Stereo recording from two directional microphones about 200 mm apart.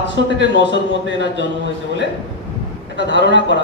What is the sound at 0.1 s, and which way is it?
A man's voice, 60° left (ahead or behind).